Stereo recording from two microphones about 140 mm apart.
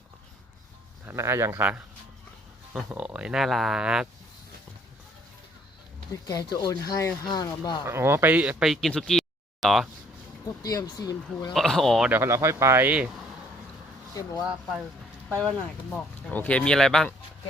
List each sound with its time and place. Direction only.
1.0 s speech: 20° right (ahead or behind)
6.2 s speech: 30° left (ahead or behind)
7.9 s speech: 20° right (ahead or behind); by 9.9 s centre (ahead or behind)
10.6 s speech: 25° left (ahead or behind)
11.5 s speech: centre (ahead or behind)
12.1 s speech: 20° right (ahead or behind)
14.1 s speech: 25° left (ahead or behind)
15.9 s speech: 10° left (ahead or behind)